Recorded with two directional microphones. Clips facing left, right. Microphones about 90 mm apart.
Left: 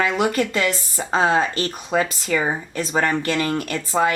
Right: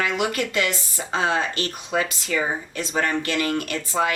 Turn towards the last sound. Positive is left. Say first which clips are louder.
# left 3 dB
turn(degrees=35)  # may be behind; listen again after turning